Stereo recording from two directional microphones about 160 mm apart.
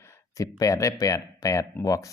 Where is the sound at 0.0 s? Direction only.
20° left (ahead or behind).